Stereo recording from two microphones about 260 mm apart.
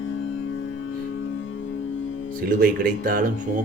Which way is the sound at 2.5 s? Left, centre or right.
Right.